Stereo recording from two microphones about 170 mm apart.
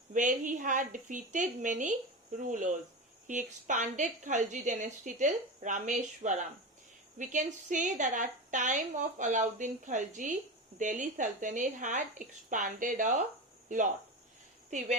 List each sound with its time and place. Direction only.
0.1 s a woman's voice: 50° right (ahead or behind)
3.2 s a woman's voice: 45° right (ahead or behind)